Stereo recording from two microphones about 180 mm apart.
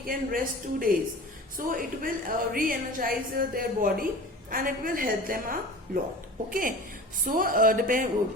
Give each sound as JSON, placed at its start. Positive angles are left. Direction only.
{"t": 0.0, "sound": "a woman's voice", "side_deg": -50}